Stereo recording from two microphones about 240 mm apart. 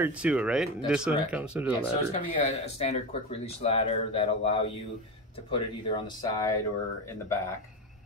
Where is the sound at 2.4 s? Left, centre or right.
Left.